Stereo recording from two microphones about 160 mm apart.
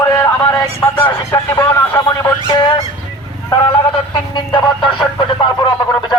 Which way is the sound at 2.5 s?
30° left (ahead or behind).